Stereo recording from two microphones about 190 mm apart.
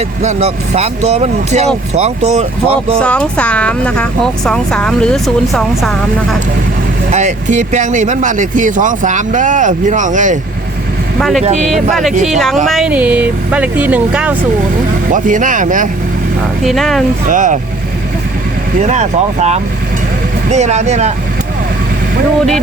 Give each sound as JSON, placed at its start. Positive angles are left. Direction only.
{"t": 0.2, "sound": "speech", "side_deg": -35}
{"t": 3.0, "sound": "speech", "side_deg": 5}
{"t": 7.1, "sound": "speech", "side_deg": -40}
{"t": 11.2, "sound": "speech", "side_deg": 0}
{"t": 15.1, "sound": "speech", "side_deg": -40}
{"t": 16.6, "sound": "speech", "side_deg": 0}
{"t": 17.2, "sound": "speech", "side_deg": -40}
{"t": 18.8, "sound": "speech", "side_deg": -35}